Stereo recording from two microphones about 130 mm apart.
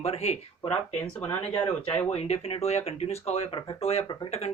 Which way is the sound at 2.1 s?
50° left (ahead or behind).